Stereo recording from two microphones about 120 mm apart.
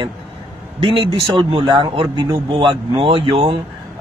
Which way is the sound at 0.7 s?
50° right (ahead or behind).